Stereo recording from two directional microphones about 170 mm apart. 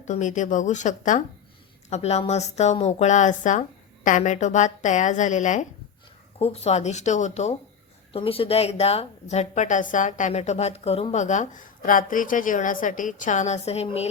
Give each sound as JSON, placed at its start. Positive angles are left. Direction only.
{"t": 0.0, "sound": "a woman's voice", "side_deg": 45}